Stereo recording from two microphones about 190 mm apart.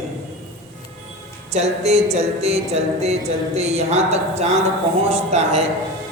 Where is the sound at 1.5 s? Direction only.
35° right (ahead or behind).